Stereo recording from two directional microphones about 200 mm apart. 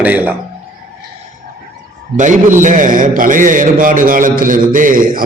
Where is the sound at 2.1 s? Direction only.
40° right (ahead or behind).